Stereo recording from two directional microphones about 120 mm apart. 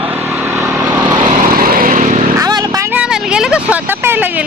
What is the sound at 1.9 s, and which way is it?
Vehicle, 90° right.